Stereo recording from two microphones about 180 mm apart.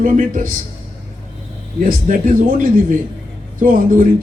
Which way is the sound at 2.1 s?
45° right (ahead or behind).